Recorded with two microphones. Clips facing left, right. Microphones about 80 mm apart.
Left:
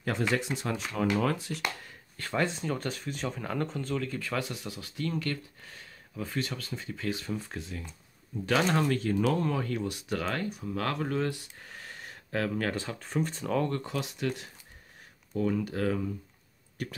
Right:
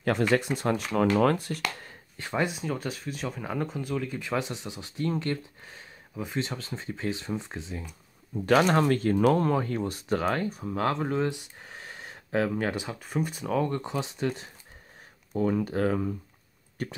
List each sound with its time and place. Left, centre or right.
0.6 s speech: right
2.1 s speech: centre
8.5 s speech: right; by 13.7 s centre
13.7 s speech: right